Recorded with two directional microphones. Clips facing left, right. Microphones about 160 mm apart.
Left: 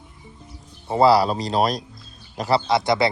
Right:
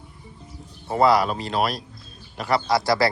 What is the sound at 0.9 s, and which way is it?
Speech, 30° left (ahead or behind).